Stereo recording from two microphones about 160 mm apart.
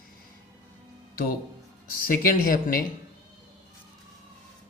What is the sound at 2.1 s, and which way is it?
Speech, 65° left (ahead or behind).